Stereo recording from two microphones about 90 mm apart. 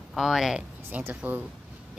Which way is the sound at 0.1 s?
5° right (ahead or behind).